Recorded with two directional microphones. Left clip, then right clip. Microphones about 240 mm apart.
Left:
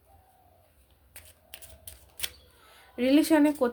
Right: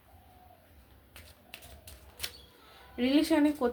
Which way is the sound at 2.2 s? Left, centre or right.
Left.